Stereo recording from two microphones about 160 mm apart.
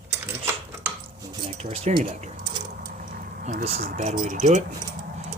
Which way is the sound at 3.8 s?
65° right (ahead or behind).